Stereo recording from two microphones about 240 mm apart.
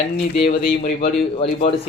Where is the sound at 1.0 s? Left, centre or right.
Left.